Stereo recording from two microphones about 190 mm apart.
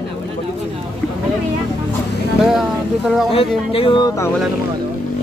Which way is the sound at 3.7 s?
25° left (ahead or behind).